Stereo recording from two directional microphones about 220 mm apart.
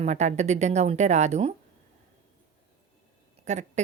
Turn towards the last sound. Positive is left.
turn(degrees=-30)  # may be behind; listen again after turning